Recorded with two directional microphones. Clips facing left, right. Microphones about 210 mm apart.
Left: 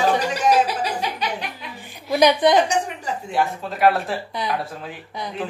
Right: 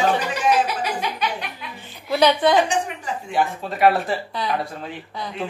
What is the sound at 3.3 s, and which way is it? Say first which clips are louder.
A man's voice: right 1 dB; centre (ahead or behind).